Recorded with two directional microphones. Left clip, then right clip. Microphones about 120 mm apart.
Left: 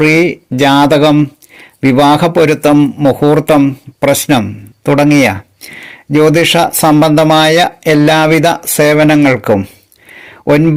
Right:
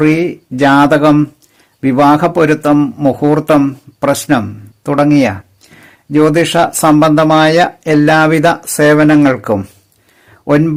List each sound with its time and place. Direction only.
0.0 s speech: 10° left (ahead or behind)
4.9 s speech: 15° left (ahead or behind)
10.2 s a sound: 20° left (ahead or behind)